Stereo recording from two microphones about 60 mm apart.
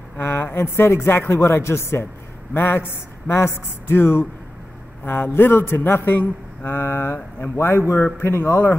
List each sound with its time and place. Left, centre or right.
0.2 s speech: left
2.5 s a man's voice: left